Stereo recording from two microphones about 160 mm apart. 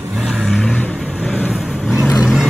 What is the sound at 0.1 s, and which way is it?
Vehicle, 5° right (ahead or behind).